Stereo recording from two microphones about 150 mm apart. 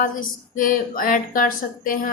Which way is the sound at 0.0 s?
65° left (ahead or behind).